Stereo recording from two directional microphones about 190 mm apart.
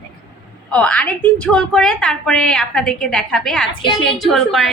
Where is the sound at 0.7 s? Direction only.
5° left (ahead or behind).